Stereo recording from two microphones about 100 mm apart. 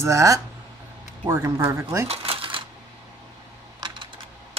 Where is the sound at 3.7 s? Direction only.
50° right (ahead or behind).